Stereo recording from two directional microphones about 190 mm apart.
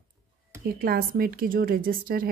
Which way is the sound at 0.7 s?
50° right (ahead or behind).